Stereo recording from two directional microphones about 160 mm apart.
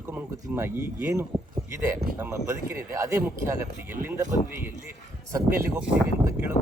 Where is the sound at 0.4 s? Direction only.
15° right (ahead or behind).